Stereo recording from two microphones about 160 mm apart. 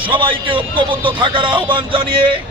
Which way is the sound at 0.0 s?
30° right (ahead or behind).